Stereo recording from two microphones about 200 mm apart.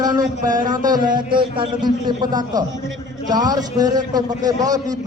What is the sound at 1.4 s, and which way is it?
A man's voice, 25° right (ahead or behind).